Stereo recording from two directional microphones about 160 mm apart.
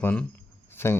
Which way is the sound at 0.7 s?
15° left (ahead or behind).